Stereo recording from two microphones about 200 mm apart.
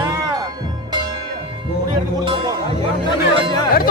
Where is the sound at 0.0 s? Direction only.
20° right (ahead or behind).